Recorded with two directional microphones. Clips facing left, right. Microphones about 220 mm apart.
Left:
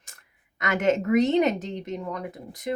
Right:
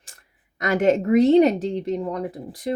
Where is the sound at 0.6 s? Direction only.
35° right (ahead or behind).